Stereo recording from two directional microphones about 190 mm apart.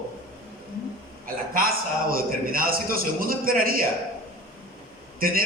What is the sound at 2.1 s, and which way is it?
A man's voice, 50° right (ahead or behind).